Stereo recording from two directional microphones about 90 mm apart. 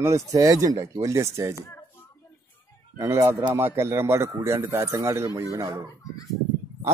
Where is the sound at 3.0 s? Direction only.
40° right (ahead or behind).